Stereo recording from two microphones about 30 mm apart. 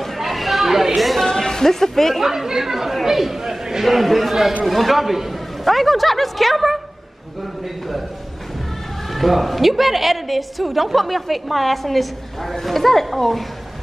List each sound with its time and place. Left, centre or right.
0.2 s chatter: centre
1.2 s a sound: centre
2.1 s speech: centre
3.4 s chatter: centre
3.8 s a woman's voice: centre
9.1 s a woman's voice: centre